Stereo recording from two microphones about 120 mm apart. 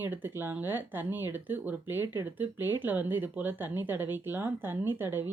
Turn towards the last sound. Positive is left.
turn(degrees=-20)  # may be behind; listen again after turning